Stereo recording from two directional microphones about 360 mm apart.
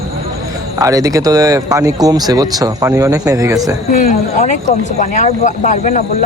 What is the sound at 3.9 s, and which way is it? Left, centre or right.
Speech, centre.